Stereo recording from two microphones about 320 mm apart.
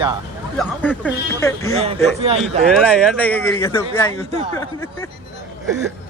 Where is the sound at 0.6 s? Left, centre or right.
Centre.